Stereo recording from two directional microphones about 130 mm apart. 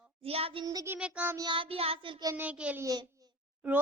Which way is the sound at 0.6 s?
25° right (ahead or behind).